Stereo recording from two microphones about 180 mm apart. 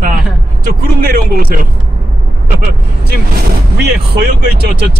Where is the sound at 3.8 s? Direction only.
65° right (ahead or behind).